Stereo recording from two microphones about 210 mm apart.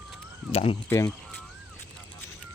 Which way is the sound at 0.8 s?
10° left (ahead or behind).